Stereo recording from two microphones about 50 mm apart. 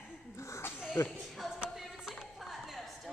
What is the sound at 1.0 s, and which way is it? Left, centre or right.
Speech, left.